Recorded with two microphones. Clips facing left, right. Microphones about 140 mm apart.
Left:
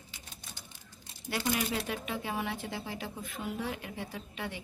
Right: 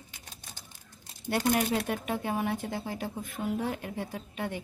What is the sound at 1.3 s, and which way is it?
Speech, 50° right (ahead or behind).